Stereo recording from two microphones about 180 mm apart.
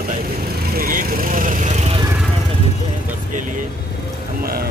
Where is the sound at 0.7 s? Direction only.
50° right (ahead or behind).